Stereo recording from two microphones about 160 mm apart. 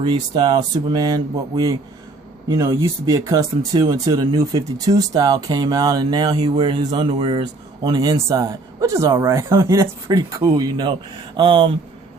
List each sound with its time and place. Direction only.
0.0 s speech: 30° right (ahead or behind)